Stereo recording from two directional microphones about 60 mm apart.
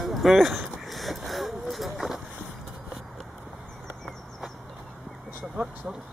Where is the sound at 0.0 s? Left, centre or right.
Centre.